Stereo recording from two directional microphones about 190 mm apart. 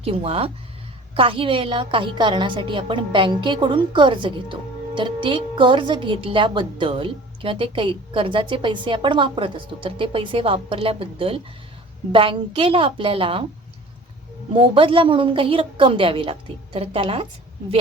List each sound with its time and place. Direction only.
0.0 s a woman's voice: 30° right (ahead or behind)
14.5 s a woman's voice: 30° right (ahead or behind)